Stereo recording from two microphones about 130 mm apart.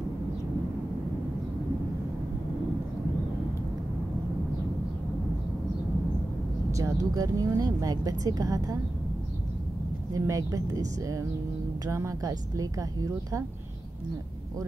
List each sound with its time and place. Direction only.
6.7 s speech: 25° right (ahead or behind)
10.1 s speech: 25° right (ahead or behind)